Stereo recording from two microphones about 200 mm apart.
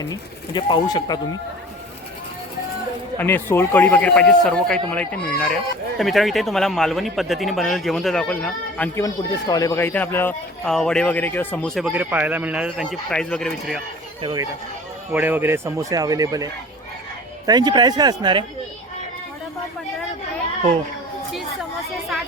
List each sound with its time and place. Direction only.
0.1 s speech: 20° left (ahead or behind)
3.2 s speech: 10° left (ahead or behind)
9.0 s speech: 20° left (ahead or behind); by 13.8 s centre (ahead or behind)
14.2 s speech: 25° right (ahead or behind)
15.1 s speech: 10° right (ahead or behind)